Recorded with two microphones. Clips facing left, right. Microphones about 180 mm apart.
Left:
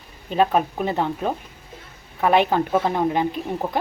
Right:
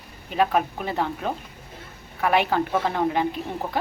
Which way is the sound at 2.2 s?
25° left (ahead or behind).